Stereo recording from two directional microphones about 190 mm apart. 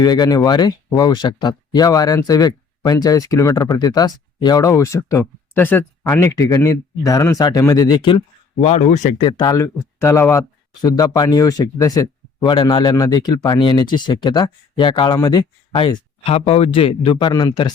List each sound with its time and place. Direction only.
0.0 s speech: 20° left (ahead or behind)
8.6 s speech: 35° left (ahead or behind)
9.1 s speech: 25° left (ahead or behind)